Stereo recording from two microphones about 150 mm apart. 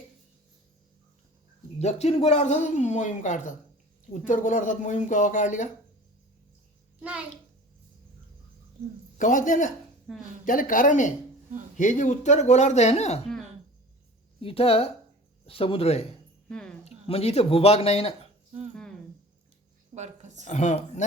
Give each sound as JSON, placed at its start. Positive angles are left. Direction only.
{"t": 1.8, "sound": "speech", "side_deg": 45}
{"t": 7.0, "sound": "a child's voice", "side_deg": -10}
{"t": 9.1, "sound": "speech", "side_deg": 60}
{"t": 10.1, "sound": "speech", "side_deg": 5}
{"t": 10.4, "sound": "speech", "side_deg": 65}
{"t": 14.4, "sound": "speech", "side_deg": 40}
{"t": 16.5, "sound": "speech", "side_deg": 5}
{"t": 16.8, "sound": "speech", "side_deg": 45}
{"t": 19.9, "sound": "a woman's voice", "side_deg": -50}
{"t": 20.5, "sound": "speech", "side_deg": 50}